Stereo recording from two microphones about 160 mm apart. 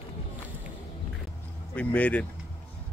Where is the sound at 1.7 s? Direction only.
10° left (ahead or behind).